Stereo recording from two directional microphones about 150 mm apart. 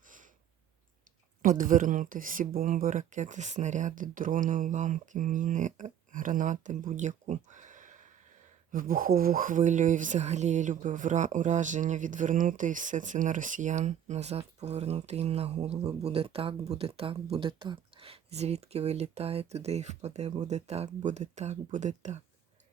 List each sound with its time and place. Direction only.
1.4 s speech: 65° right (ahead or behind)